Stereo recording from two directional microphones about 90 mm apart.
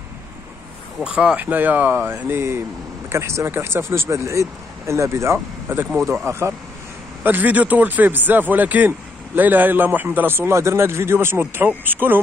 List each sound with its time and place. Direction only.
1.0 s speech: 10° right (ahead or behind); by 5.9 s 25° right (ahead or behind)
5.9 s speech: centre (ahead or behind)
7.2 s speech: 20° right (ahead or behind)